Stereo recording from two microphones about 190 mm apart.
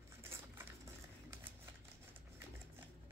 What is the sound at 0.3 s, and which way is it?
Patter, 10° right (ahead or behind).